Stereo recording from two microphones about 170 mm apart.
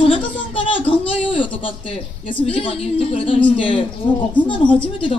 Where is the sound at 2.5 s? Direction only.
35° left (ahead or behind).